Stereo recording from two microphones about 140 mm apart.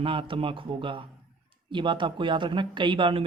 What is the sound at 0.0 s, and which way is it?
Speech, 40° right (ahead or behind).